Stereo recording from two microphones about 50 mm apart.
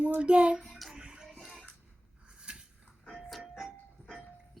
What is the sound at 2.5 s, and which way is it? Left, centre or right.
Livestock, centre.